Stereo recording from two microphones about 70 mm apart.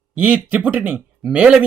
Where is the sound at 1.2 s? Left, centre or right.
Centre.